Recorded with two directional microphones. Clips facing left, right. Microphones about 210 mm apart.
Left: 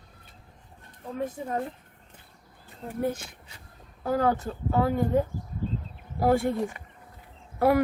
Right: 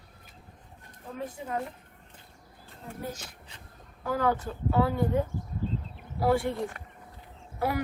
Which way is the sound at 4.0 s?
40° left (ahead or behind).